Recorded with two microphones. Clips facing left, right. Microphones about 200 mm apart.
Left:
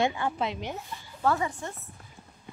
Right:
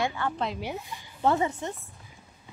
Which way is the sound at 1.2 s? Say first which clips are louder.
Right 2 dB; 25° right (ahead or behind).